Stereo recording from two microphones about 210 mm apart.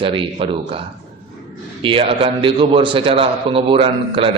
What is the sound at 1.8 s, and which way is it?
A man's voice, 25° right (ahead or behind).